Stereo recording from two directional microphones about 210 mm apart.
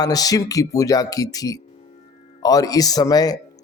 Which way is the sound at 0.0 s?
15° left (ahead or behind).